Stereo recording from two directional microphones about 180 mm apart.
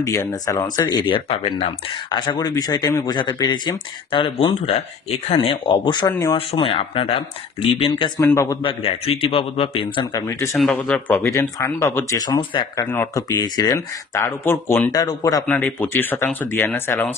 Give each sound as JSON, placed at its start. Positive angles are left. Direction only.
{"t": 0.0, "sound": "speech", "side_deg": 15}
{"t": 6.6, "sound": "speech", "side_deg": 30}
{"t": 8.6, "sound": "speech", "side_deg": 30}
{"t": 10.5, "sound": "speech", "side_deg": 5}
{"t": 15.4, "sound": "speech", "side_deg": 10}